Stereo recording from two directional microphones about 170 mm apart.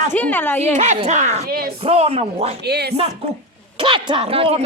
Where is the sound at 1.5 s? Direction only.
65° right (ahead or behind).